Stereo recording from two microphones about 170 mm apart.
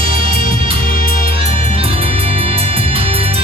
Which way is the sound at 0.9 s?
55° left (ahead or behind).